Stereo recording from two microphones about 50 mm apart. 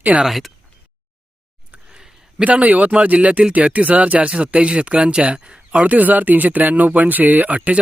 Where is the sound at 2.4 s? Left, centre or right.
Right.